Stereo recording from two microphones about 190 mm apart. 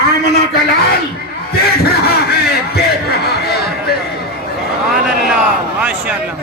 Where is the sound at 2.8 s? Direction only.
55° left (ahead or behind).